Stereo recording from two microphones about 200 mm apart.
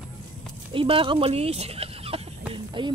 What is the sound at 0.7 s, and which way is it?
Speech, 25° right (ahead or behind).